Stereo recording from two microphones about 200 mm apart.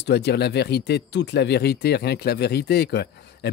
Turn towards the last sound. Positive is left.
turn(degrees=55)  # may be behind; listen again after turning